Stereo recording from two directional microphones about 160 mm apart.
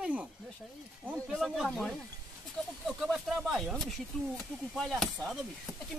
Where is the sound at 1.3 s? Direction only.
Centre (ahead or behind).